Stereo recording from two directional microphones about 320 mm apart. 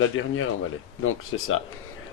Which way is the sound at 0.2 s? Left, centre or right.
Left.